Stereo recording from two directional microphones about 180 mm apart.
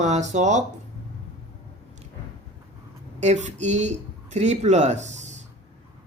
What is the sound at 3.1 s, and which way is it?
Speech, 40° right (ahead or behind).